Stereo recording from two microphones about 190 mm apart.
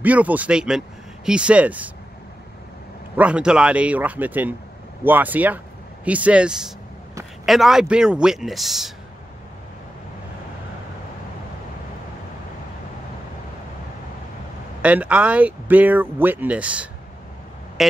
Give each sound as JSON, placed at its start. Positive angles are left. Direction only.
{"t": 0.0, "sound": "speech", "side_deg": -10}
{"t": 3.2, "sound": "a man's voice", "side_deg": -5}
{"t": 14.8, "sound": "speech", "side_deg": -5}
{"t": 17.8, "sound": "a sound", "side_deg": 0}